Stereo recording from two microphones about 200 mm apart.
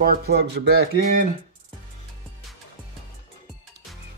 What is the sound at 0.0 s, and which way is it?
Speech, 50° right (ahead or behind).